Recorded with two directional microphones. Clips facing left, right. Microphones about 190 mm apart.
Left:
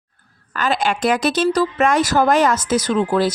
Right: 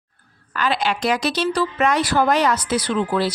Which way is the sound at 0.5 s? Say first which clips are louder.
Left 2 dB; 45° left (ahead or behind).